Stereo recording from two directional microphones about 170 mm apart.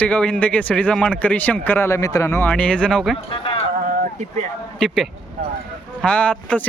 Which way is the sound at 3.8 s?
50° right (ahead or behind).